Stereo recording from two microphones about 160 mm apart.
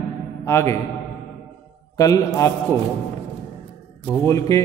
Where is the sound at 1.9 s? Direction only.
20° left (ahead or behind).